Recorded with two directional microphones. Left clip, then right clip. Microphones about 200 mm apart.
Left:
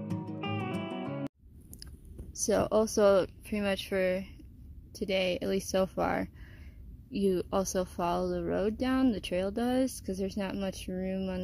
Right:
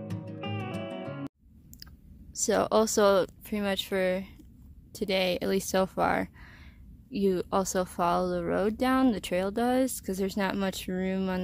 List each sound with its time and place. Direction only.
0.1 s music: centre (ahead or behind)
2.4 s speech: 10° right (ahead or behind); by 11.4 s 25° right (ahead or behind)